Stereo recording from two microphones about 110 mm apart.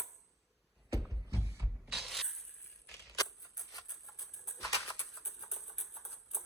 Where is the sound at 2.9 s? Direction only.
30° left (ahead or behind).